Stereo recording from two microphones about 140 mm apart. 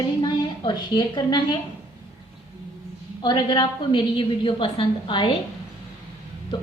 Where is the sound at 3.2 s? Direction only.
30° left (ahead or behind).